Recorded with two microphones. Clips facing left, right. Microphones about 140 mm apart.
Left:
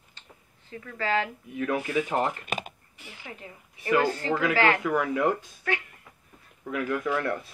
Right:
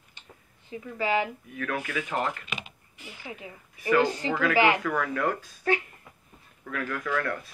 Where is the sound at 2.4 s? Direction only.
50° left (ahead or behind).